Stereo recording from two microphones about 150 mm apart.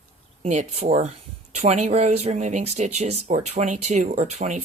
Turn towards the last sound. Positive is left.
turn(degrees=-50)  # may be behind; listen again after turning